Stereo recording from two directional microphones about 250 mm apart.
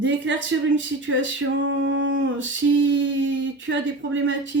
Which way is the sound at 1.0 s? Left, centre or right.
Right.